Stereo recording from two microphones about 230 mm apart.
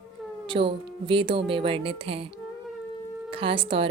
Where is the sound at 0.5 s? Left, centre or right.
Right.